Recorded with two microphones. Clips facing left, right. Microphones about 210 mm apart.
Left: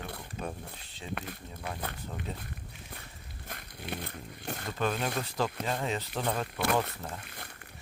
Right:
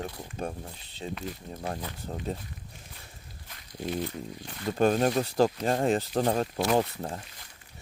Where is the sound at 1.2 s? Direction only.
55° left (ahead or behind).